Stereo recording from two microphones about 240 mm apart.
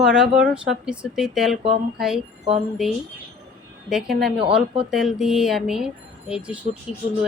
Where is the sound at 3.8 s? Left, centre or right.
Centre.